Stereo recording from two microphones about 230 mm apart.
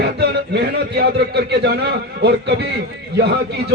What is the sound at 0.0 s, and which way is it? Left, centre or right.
Speech, right.